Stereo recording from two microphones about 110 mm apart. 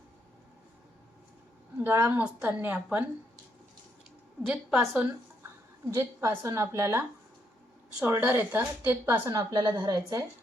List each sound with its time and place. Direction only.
1.8 s a woman's voice: 20° right (ahead or behind)
4.4 s a woman's voice: 20° right (ahead or behind)
8.0 s a woman's voice: 20° right (ahead or behind)